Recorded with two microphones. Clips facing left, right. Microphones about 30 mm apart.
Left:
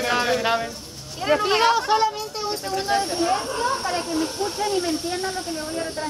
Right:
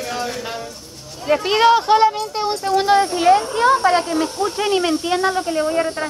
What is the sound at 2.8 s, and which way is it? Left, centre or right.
Speech, right.